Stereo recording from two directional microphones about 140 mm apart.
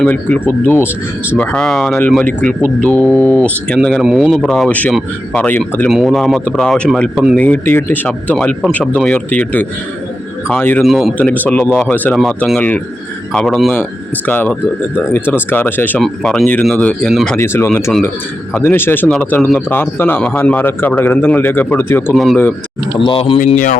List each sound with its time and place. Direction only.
0.0 s speech: 10° left (ahead or behind)
4.0 s speech: 5° right (ahead or behind); by 5.9 s 15° left (ahead or behind)
5.9 s speech: centre (ahead or behind)
10.8 s speech: centre (ahead or behind)
11.2 s speech: 10° left (ahead or behind)
17.3 s speech: 15° left (ahead or behind)
22.1 s speech: centre (ahead or behind)
23.0 s speech: 40° left (ahead or behind)